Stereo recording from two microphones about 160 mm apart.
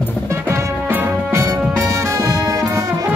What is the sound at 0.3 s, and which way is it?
Music, 15° right (ahead or behind).